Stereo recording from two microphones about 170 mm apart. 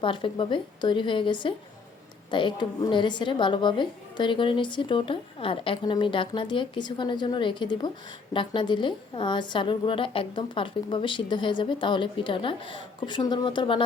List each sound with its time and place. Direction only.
0.0 s a woman's voice: 30° left (ahead or behind)